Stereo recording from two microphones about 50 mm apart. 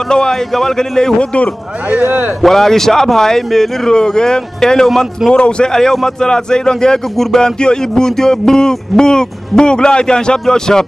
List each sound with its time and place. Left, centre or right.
0.1 s speech: centre
1.9 s a man's voice: right
2.4 s speech: centre